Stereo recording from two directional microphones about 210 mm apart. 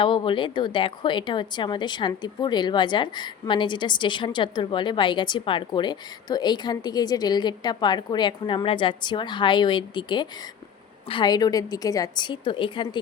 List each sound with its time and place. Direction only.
0.0 s a woman's voice: 25° left (ahead or behind)